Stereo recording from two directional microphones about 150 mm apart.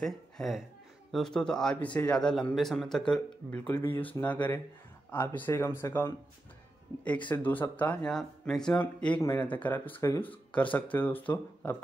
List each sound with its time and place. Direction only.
0.0 s a man's voice: centre (ahead or behind); by 6.1 s 20° left (ahead or behind)
7.2 s speech: 10° left (ahead or behind)